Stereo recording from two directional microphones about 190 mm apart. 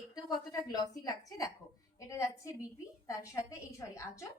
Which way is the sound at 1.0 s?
20° left (ahead or behind).